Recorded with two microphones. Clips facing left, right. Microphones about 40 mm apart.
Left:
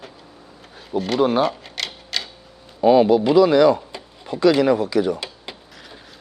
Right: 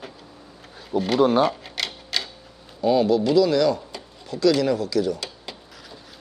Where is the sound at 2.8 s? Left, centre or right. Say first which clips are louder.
Left 5 dB; left.